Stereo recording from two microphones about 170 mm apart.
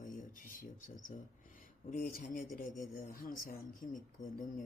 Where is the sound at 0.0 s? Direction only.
50° left (ahead or behind).